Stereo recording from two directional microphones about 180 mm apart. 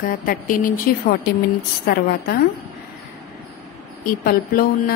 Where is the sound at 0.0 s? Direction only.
50° left (ahead or behind).